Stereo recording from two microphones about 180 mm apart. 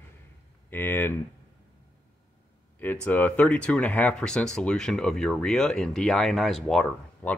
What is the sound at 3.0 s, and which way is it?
Speech, 10° left (ahead or behind).